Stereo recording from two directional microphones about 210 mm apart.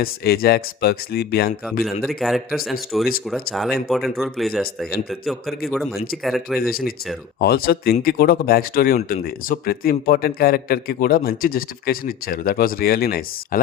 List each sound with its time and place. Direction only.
0.0 s a man's voice: 45° left (ahead or behind)
1.8 s speech: centre (ahead or behind)
6.6 s a man's voice: 45° left (ahead or behind)